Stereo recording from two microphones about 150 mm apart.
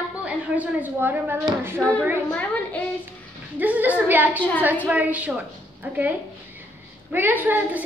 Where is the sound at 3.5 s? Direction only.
10° right (ahead or behind).